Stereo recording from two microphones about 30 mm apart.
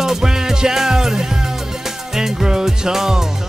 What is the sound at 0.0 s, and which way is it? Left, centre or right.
Music, centre.